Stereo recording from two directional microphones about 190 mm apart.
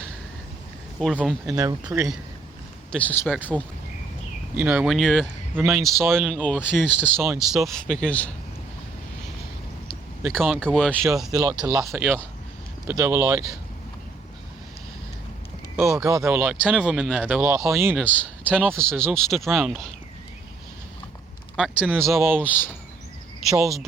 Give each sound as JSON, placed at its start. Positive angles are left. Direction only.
{"t": 0.9, "sound": "speech", "side_deg": 0}
{"t": 2.9, "sound": "speech", "side_deg": 10}
{"t": 4.5, "sound": "speech", "side_deg": -10}
{"t": 7.3, "sound": "speech", "side_deg": 0}
{"t": 10.3, "sound": "speech", "side_deg": 0}
{"t": 11.3, "sound": "speech", "side_deg": -15}
{"t": 11.9, "sound": "speech", "side_deg": -5}
{"t": 15.7, "sound": "speech", "side_deg": -10}
{"t": 17.5, "sound": "speech", "side_deg": -15}
{"t": 17.9, "sound": "speech", "side_deg": 5}
{"t": 21.5, "sound": "speech", "side_deg": 0}
{"t": 22.1, "sound": "speech", "side_deg": -10}
{"t": 22.4, "sound": "speech", "side_deg": 10}